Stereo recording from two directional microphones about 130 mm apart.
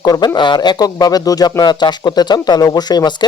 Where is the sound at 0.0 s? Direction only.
30° left (ahead or behind).